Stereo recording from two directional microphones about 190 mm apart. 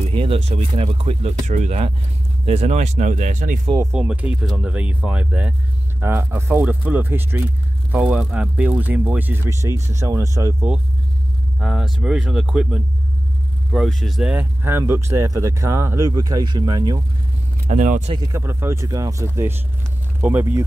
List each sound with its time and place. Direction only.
0.0 s speech: 30° right (ahead or behind)
3.7 s speech: 15° right (ahead or behind)
11.6 s speech: centre (ahead or behind); by 17.0 s 20° right (ahead or behind)
17.6 s speech: 40° right (ahead or behind)
18.3 s speech: 15° right (ahead or behind)